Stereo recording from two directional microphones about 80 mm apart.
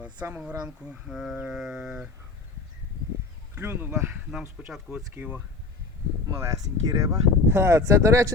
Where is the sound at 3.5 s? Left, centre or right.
Right.